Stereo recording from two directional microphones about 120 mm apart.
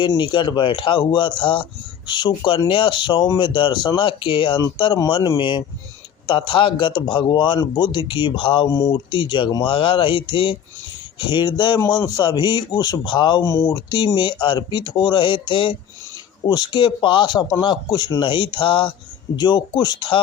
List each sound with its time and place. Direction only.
0.2 s a man's voice: 40° left (ahead or behind)
8.7 s speech: 25° left (ahead or behind)
9.0 s a man's voice: 45° left (ahead or behind)
13.4 s speech: 25° left (ahead or behind)
14.4 s a man's voice: 40° left (ahead or behind)